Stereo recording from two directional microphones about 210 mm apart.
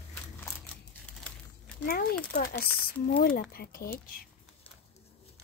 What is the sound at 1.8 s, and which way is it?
A woman's voice, 45° left (ahead or behind).